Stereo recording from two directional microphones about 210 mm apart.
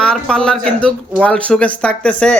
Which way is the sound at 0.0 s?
5° left (ahead or behind).